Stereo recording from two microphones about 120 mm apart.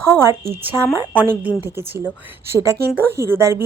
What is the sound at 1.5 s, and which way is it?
A woman's voice, 20° right (ahead or behind).